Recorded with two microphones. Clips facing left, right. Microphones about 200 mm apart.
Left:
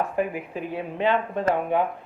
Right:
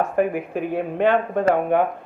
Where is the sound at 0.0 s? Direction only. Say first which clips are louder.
Right 5 dB; 55° right (ahead or behind).